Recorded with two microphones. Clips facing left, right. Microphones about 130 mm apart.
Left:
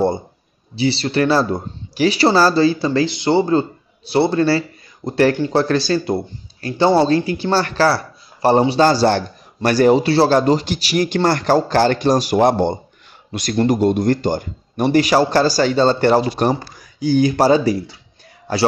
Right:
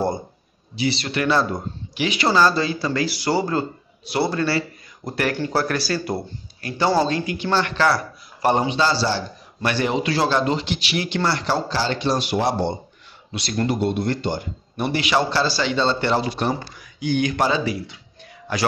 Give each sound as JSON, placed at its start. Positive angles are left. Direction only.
{"t": 0.7, "sound": "a man's voice", "side_deg": 30}
{"t": 8.7, "sound": "speech", "side_deg": 45}
{"t": 9.6, "sound": "a man's voice", "side_deg": 40}